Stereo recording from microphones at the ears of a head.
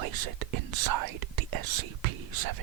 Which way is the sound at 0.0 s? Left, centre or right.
Right.